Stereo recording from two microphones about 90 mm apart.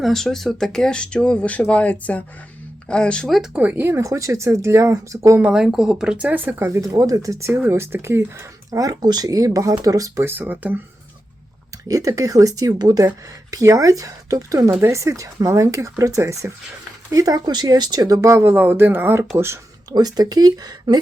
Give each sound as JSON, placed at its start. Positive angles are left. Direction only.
{"t": 0.0, "sound": "speech", "side_deg": 5}
{"t": 3.5, "sound": "speech", "side_deg": -15}
{"t": 3.8, "sound": "speech", "side_deg": -35}
{"t": 5.4, "sound": "speech", "side_deg": -5}
{"t": 6.2, "sound": "speech", "side_deg": -20}
{"t": 8.8, "sound": "speech", "side_deg": -50}
{"t": 10.2, "sound": "speech", "side_deg": -20}
{"t": 11.9, "sound": "speech", "side_deg": -40}
{"t": 19.9, "sound": "speech", "side_deg": -45}